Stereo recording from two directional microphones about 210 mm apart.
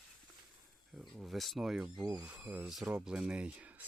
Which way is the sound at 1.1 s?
Centre (ahead or behind).